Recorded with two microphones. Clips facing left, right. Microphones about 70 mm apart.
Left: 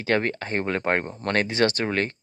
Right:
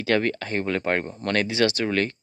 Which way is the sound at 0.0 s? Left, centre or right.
Left.